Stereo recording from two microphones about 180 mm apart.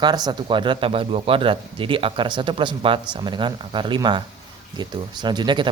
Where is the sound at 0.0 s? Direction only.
25° right (ahead or behind).